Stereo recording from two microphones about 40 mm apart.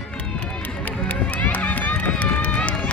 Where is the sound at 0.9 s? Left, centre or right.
Left.